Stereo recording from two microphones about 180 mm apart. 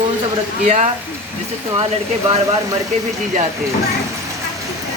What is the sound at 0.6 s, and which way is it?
Speech, 40° right (ahead or behind).